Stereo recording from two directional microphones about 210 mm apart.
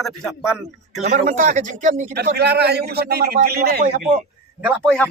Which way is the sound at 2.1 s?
50° right (ahead or behind).